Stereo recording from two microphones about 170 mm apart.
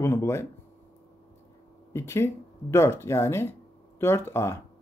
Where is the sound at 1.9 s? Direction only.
15° left (ahead or behind).